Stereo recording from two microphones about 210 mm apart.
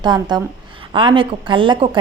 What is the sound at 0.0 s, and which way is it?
A woman's voice, 20° right (ahead or behind).